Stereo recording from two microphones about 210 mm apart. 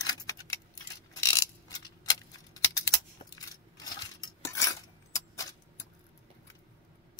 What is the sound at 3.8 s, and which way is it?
Cutlery, 15° left (ahead or behind).